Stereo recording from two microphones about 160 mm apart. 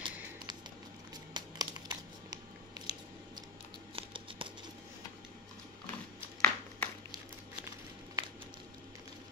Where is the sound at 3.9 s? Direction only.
35° right (ahead or behind).